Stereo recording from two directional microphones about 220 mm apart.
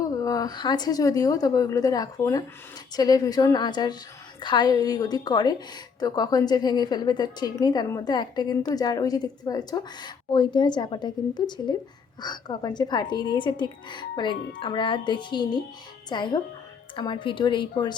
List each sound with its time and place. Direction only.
0.0 s a woman's voice: 15° left (ahead or behind)